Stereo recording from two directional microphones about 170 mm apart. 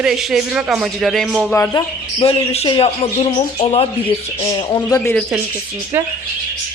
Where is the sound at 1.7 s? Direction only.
30° left (ahead or behind).